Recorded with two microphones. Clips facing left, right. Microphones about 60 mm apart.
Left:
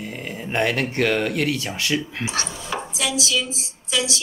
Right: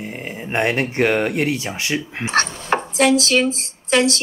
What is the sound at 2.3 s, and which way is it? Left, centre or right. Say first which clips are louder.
Speech: right 13 dB; right.